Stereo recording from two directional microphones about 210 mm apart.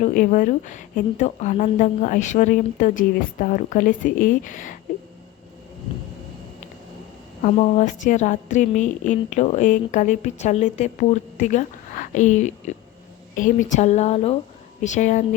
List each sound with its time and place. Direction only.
0.0 s a woman's voice: 40° left (ahead or behind)
7.4 s a woman's voice: 35° left (ahead or behind)